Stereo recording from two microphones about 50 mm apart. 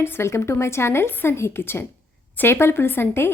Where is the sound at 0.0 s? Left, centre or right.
Left.